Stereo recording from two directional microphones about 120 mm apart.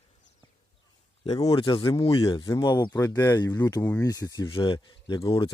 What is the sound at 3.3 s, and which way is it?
Speech, 35° left (ahead or behind).